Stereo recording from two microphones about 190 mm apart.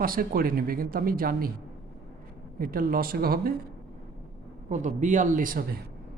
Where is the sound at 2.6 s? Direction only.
50° right (ahead or behind).